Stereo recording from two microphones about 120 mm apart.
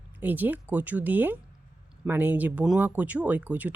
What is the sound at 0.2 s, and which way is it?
Speech, 15° right (ahead or behind).